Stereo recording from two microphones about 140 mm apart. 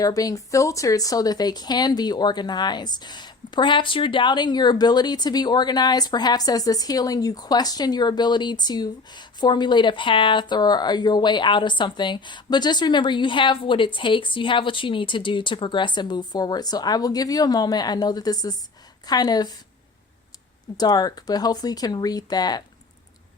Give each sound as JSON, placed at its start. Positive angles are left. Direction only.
{"t": 0.0, "sound": "speech", "side_deg": 25}
{"t": 20.7, "sound": "speech", "side_deg": 30}